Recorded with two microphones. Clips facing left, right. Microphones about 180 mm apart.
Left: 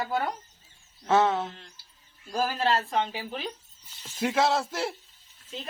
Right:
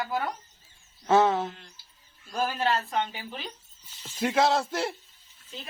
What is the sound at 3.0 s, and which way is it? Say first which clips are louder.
Speech: left 3 dB; 35° left (ahead or behind).